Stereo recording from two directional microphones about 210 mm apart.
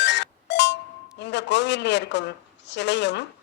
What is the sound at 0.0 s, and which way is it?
Music, 55° left (ahead or behind).